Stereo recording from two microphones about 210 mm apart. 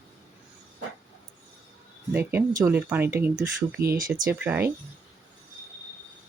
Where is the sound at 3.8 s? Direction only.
45° right (ahead or behind).